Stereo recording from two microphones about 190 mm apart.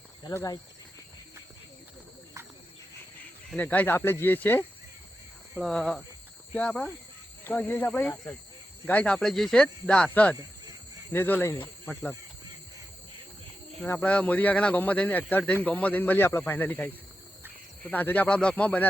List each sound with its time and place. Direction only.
0.3 s speech: 20° left (ahead or behind)
3.5 s speech: 10° left (ahead or behind)
13.8 s speech: 10° left (ahead or behind)
17.9 s speech: 10° left (ahead or behind)